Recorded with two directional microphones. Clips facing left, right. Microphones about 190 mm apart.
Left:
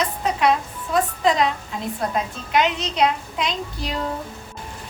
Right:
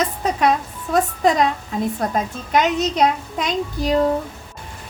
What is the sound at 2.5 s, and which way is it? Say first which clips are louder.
A child's voice: right 3 dB; 45° right (ahead or behind).